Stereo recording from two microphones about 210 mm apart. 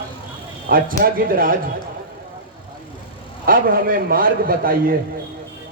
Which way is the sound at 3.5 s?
45° right (ahead or behind).